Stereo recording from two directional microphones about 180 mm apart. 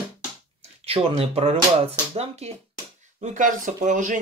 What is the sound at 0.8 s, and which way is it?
Speech, 35° right (ahead or behind).